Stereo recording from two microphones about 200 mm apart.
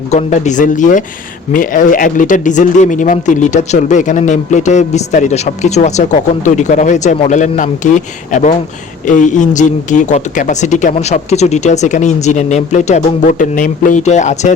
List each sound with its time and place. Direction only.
0.1 s speech: 35° left (ahead or behind)